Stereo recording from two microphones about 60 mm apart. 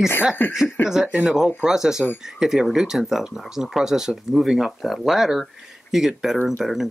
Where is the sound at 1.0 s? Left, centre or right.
Right.